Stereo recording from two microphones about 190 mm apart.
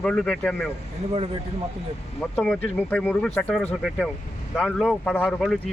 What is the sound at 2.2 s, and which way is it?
Speech, 5° left (ahead or behind).